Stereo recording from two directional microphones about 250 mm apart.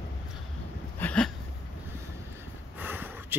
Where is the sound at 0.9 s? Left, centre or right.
Centre.